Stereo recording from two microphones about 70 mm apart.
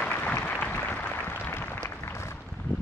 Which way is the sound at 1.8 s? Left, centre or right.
Left.